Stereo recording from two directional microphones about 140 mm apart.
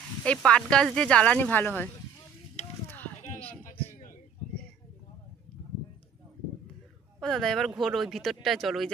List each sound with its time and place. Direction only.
0.2 s speech: 10° left (ahead or behind)
2.6 s a sound: 50° left (ahead or behind)
7.2 s speech: 5° left (ahead or behind)